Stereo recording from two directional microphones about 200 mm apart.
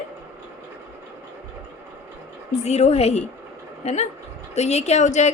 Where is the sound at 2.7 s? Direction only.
35° left (ahead or behind).